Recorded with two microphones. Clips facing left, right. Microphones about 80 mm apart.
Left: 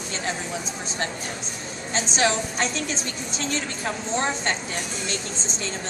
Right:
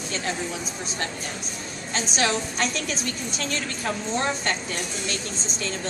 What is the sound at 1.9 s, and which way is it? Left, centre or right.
A woman's voice, left.